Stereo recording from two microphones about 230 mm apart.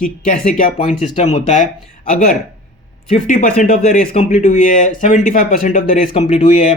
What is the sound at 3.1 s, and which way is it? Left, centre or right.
Speech, left.